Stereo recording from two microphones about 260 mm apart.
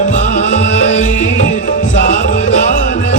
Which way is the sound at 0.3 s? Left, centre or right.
Left.